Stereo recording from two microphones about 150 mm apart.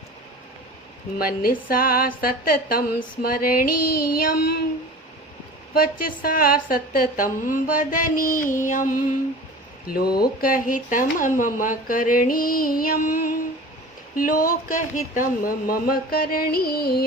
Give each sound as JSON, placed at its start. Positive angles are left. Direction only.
{"t": 1.2, "sound": "speech", "side_deg": 80}
{"t": 4.2, "sound": "child singing", "side_deg": 85}
{"t": 5.7, "sound": "speech", "side_deg": 75}
{"t": 8.6, "sound": "music", "side_deg": 60}
{"t": 9.8, "sound": "speech", "side_deg": 80}
{"t": 10.4, "sound": "speech", "side_deg": 65}